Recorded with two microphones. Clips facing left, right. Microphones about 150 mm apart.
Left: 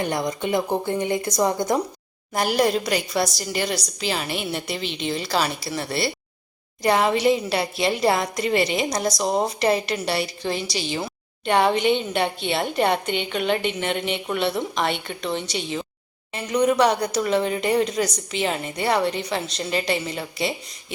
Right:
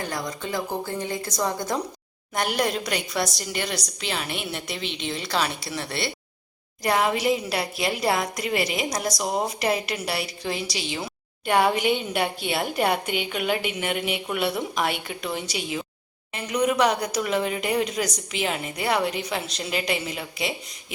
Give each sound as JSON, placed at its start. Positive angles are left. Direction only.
{"t": 0.0, "sound": "speech", "side_deg": 20}
{"t": 2.3, "sound": "speech", "side_deg": 5}